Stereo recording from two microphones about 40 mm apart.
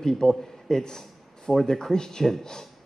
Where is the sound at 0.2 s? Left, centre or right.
Centre.